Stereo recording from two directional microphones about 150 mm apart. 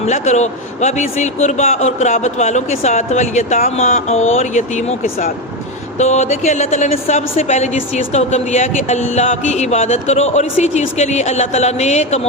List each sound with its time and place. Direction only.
0.0 s speech: 50° left (ahead or behind); by 5.3 s 70° left (ahead or behind)
6.0 s speech: 50° left (ahead or behind)